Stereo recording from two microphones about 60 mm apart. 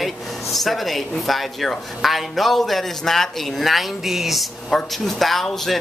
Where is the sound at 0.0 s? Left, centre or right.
Centre.